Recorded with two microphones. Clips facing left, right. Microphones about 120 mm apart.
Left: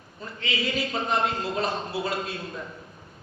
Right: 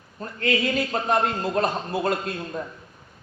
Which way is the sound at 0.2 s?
50° right (ahead or behind).